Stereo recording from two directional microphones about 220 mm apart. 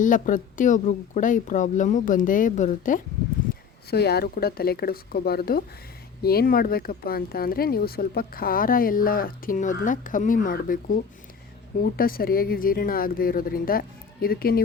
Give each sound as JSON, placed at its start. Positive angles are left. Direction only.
{"t": 0.0, "sound": "speech", "side_deg": 35}
{"t": 3.5, "sound": "speech", "side_deg": 45}